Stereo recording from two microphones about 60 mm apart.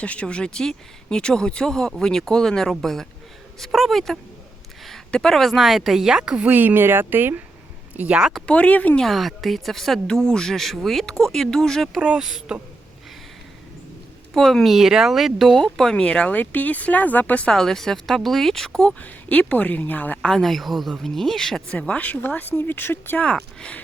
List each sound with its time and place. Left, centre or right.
0.0 s speech: centre
6.5 s speech: right
7.9 s speech: right
8.4 s speech: left
9.0 s speech: centre
11.9 s speech: centre
14.3 s speech: centre
16.0 s speech: centre
16.3 s speech: left
17.5 s speech: centre
18.9 s speech: left
20.2 s speech: centre
21.7 s speech: centre; by 23.2 s left
23.2 s speech: centre